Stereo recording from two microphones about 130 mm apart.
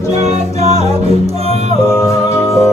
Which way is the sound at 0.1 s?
55° right (ahead or behind).